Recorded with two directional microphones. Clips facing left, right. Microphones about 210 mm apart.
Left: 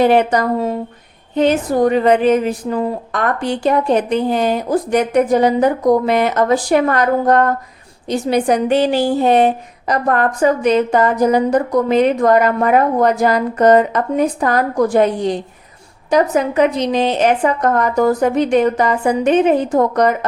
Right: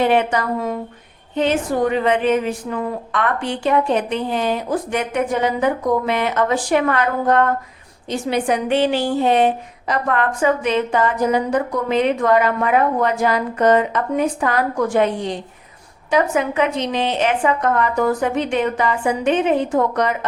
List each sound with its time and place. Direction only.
0.0 s a woman's voice: 40° left (ahead or behind)